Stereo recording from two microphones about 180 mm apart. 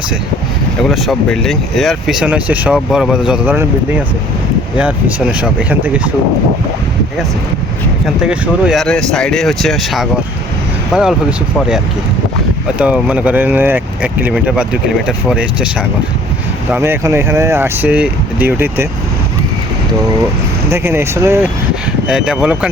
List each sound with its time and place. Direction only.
0.8 s speech: centre (ahead or behind)
8.0 s speech: 5° right (ahead or behind)
12.8 s speech: 5° right (ahead or behind)
20.7 s speech: 15° right (ahead or behind)